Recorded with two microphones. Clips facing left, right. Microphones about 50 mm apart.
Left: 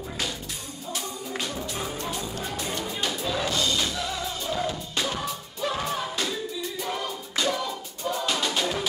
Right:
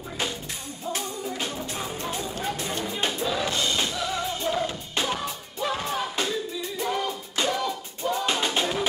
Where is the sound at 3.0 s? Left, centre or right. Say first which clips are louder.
Right 2 dB; right.